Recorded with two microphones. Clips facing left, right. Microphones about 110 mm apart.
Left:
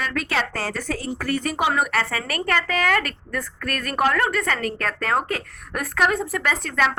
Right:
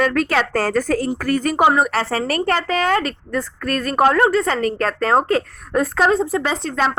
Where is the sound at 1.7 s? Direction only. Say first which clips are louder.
Right 5 dB; 30° right (ahead or behind).